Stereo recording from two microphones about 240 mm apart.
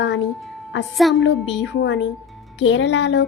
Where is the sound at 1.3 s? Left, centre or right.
Left.